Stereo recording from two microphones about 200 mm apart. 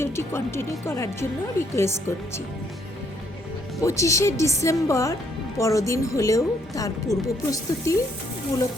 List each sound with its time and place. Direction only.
0.0 s speech: 10° left (ahead or behind)
3.8 s speech: 15° left (ahead or behind)